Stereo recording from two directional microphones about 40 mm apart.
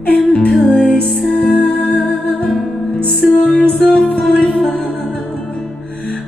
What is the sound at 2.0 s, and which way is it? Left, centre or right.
Music, left.